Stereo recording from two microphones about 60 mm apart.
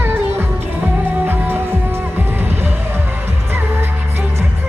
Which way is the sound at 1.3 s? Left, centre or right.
Right.